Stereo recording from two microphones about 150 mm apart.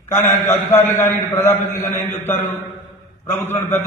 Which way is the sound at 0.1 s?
20° left (ahead or behind).